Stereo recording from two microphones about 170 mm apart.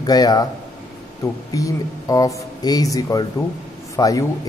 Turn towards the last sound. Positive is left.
turn(degrees=20)  # may be behind; listen again after turning